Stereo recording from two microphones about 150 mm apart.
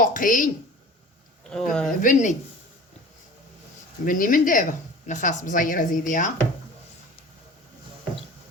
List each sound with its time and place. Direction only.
0.0 s speech: 65° left (ahead or behind)
1.5 s speech: 5° left (ahead or behind)
2.0 s speech: 60° left (ahead or behind)
4.0 s speech: 65° left (ahead or behind)